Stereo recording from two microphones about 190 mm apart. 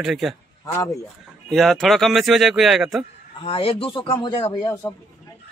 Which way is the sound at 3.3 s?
30° left (ahead or behind).